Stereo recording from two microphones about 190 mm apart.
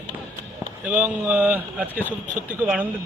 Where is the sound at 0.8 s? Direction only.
5° right (ahead or behind).